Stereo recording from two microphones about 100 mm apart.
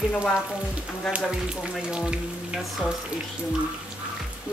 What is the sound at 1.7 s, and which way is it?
Speech, 10° right (ahead or behind).